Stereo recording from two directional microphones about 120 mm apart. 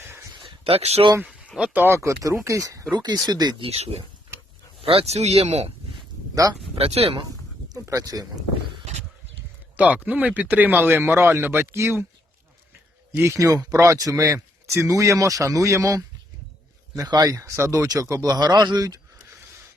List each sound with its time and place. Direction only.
0.3 s a sound: 50° right (ahead or behind)
1.5 s speech: 10° right (ahead or behind); by 3.7 s 35° right (ahead or behind)
3.7 s speech: 60° right (ahead or behind)
6.3 s speech: 30° right (ahead or behind)
6.7 s speech: 55° right (ahead or behind)
7.7 s speech: 30° right (ahead or behind)
9.7 s speech: 10° right (ahead or behind)
13.1 s speech: 25° right (ahead or behind)